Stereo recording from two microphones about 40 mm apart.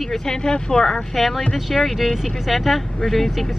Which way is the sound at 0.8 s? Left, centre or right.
Centre.